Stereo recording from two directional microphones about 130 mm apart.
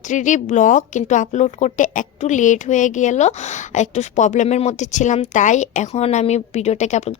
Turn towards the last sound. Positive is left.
turn(degrees=65)  # may be behind; listen again after turning